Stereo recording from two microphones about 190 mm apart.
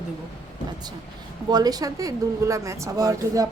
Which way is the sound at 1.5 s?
20° right (ahead or behind).